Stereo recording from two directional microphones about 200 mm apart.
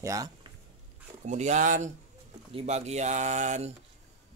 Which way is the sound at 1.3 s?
35° right (ahead or behind).